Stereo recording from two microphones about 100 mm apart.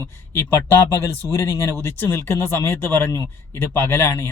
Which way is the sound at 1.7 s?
25° left (ahead or behind).